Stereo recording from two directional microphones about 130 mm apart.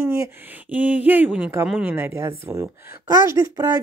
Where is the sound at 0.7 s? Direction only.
10° right (ahead or behind).